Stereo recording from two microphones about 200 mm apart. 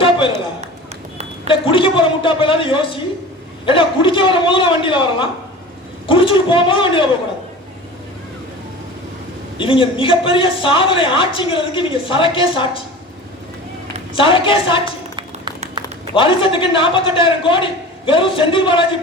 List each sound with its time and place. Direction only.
1.5 s a woman's voice: 25° left (ahead or behind)
9.6 s a woman's voice: 25° left (ahead or behind)
14.1 s a woman's voice: 25° left (ahead or behind)
15.1 s a sound: 25° right (ahead or behind)
16.1 s a woman's voice: 25° left (ahead or behind)